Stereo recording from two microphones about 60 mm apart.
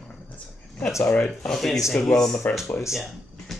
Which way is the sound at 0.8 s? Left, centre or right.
Left.